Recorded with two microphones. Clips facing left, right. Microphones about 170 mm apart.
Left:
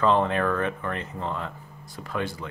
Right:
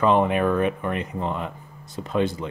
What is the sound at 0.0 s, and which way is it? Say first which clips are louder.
Speech: right 3 dB; 15° right (ahead or behind).